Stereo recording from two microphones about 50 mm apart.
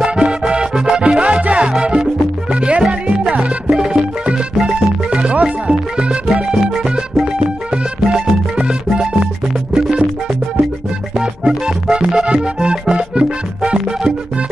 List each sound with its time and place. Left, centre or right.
0.1 s music: centre
7.3 s music: right
11.1 s music: centre